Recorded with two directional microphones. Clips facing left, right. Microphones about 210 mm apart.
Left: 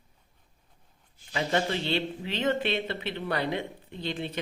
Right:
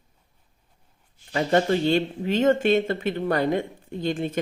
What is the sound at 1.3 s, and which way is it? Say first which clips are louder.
Speech: right 7 dB; 45° right (ahead or behind).